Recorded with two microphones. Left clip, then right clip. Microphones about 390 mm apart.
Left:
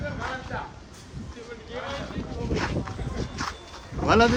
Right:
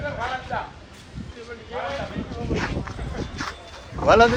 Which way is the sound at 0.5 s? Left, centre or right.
Centre.